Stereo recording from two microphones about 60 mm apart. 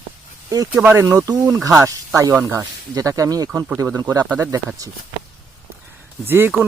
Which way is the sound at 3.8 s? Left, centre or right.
Right.